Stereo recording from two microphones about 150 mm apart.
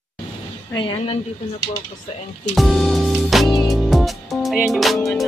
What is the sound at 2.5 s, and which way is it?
Music, centre (ahead or behind).